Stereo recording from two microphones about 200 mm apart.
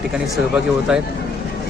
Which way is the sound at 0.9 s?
5° right (ahead or behind).